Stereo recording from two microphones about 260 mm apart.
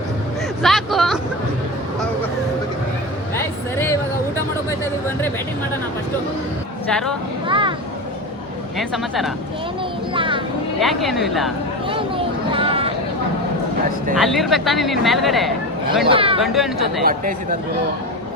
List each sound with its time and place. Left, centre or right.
0.6 s a sound: centre
3.3 s a sound: centre
6.9 s speech: centre
7.4 s vehicle: centre
8.8 s speech: centre
10.2 s speech: centre
10.8 s speech: centre
11.9 s a sound: centre
14.2 s speech: centre
16.0 s speech: right
16.4 s speech: centre
17.1 s speech: right